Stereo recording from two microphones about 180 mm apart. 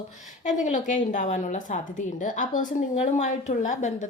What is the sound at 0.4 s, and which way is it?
A woman's voice, 45° left (ahead or behind).